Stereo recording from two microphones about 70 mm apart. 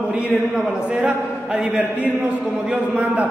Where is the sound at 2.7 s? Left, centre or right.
Centre.